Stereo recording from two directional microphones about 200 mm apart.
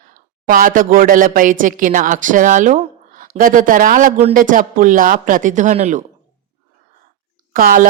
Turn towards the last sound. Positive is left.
turn(degrees=-40)  # may be behind; listen again after turning